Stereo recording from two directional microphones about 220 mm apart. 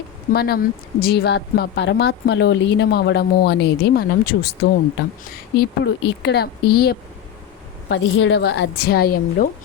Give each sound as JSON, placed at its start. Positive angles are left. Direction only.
{"t": 0.3, "sound": "speech", "side_deg": 45}
{"t": 7.9, "sound": "speech", "side_deg": 55}